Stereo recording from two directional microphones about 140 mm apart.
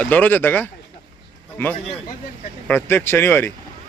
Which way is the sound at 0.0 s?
10° left (ahead or behind).